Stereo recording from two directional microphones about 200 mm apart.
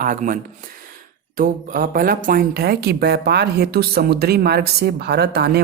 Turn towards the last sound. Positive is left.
turn(degrees=-55)  # may be behind; listen again after turning